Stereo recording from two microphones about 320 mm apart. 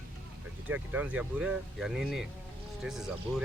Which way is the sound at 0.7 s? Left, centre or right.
Centre.